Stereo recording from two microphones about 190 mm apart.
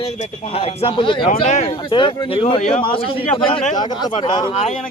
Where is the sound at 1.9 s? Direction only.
25° left (ahead or behind).